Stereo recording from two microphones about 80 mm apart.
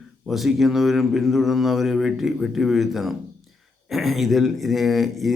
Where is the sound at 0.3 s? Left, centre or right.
Centre.